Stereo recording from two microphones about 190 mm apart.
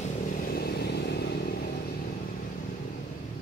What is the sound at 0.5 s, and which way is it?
Motorcycle, 60° left (ahead or behind).